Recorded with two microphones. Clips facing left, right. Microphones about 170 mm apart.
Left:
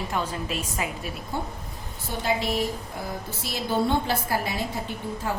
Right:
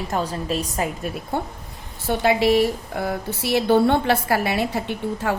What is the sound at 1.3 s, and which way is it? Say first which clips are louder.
Speech: right 5 dB; 60° right (ahead or behind).